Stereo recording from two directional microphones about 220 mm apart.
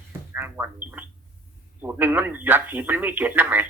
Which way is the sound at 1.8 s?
10° right (ahead or behind).